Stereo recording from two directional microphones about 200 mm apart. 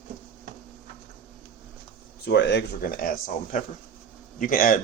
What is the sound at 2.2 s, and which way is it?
Speech, 60° left (ahead or behind).